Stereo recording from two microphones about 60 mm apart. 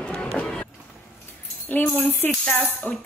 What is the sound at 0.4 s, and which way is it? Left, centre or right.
Vehicle, left.